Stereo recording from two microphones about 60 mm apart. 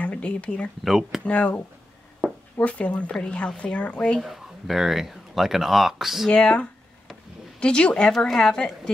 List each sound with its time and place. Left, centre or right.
0.0 s speech: left
0.8 s speech: centre
1.2 s speech: left
2.6 s a woman's voice: left
4.2 s speech: centre
6.3 s a woman's voice: centre